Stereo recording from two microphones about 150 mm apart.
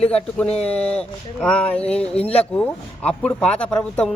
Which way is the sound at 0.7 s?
10° left (ahead or behind).